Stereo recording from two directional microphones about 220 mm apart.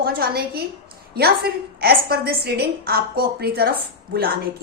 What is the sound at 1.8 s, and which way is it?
A woman's voice, 45° right (ahead or behind).